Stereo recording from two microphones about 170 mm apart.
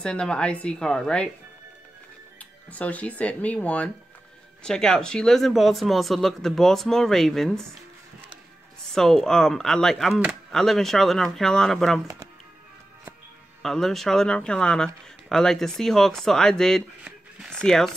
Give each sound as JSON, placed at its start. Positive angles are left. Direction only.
{"t": 0.0, "sound": "speech", "side_deg": 5}
{"t": 2.3, "sound": "speech", "side_deg": 10}
{"t": 8.8, "sound": "speech", "side_deg": 5}
{"t": 13.6, "sound": "speech", "side_deg": 0}